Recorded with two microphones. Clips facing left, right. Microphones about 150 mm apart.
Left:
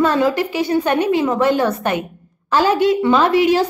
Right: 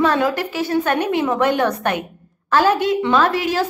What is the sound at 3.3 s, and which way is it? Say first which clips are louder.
Speech: left 7 dB; 45° right (ahead or behind).